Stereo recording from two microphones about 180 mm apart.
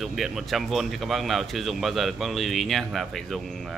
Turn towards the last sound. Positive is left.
turn(degrees=0)  # may be behind; listen again after turning